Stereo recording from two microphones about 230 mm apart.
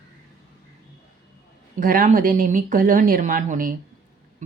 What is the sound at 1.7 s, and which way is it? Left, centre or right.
A woman's voice, right.